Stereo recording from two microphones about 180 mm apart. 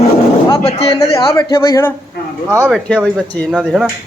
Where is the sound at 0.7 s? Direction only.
35° left (ahead or behind).